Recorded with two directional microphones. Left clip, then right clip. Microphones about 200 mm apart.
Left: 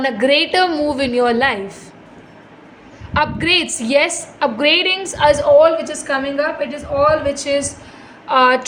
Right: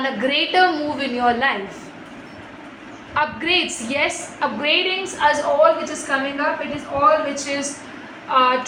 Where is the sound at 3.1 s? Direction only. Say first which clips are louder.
Left 4 dB; 55° left (ahead or behind).